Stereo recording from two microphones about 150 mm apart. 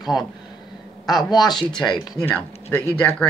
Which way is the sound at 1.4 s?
30° left (ahead or behind).